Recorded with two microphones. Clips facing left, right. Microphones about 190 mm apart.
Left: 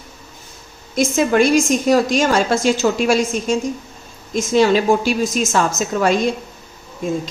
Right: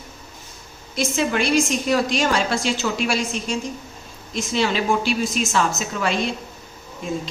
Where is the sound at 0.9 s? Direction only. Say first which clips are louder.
Left 7 dB; 45° left (ahead or behind).